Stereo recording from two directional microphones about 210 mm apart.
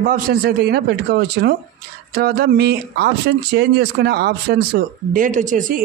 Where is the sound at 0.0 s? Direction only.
45° right (ahead or behind).